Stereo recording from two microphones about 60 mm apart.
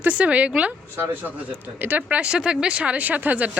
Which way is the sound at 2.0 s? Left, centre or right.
Centre.